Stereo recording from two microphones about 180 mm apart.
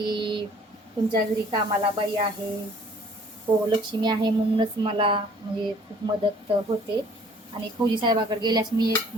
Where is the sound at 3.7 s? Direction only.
25° right (ahead or behind).